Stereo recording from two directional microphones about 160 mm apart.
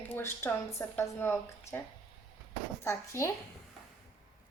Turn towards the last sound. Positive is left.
turn(degrees=15)  # may be behind; listen again after turning